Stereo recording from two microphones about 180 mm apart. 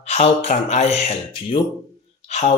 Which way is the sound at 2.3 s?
40° left (ahead or behind).